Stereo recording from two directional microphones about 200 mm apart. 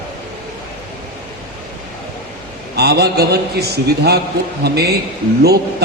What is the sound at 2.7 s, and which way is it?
A man's voice, 55° right (ahead or behind).